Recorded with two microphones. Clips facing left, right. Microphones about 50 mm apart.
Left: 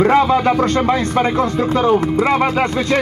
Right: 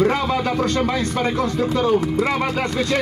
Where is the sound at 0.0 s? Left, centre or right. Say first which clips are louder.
Left 6 dB; left.